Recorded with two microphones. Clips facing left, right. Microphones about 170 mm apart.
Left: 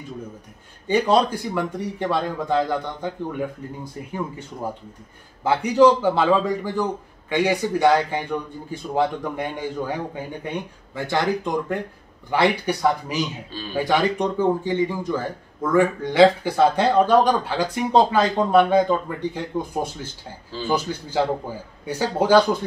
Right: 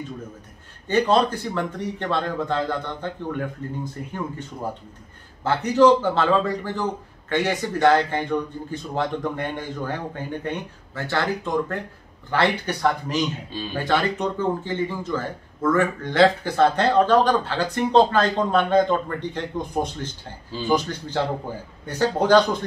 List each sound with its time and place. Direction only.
0.8 s a man's voice: 10° left (ahead or behind)